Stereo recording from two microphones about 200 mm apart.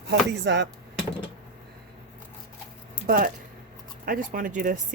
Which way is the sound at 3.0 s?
45° right (ahead or behind).